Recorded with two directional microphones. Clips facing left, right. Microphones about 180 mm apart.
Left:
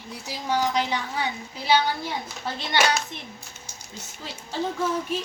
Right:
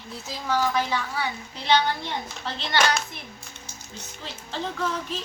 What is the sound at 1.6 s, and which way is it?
Speech, 5° left (ahead or behind).